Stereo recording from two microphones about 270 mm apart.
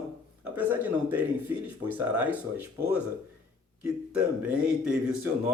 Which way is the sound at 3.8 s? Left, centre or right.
Centre.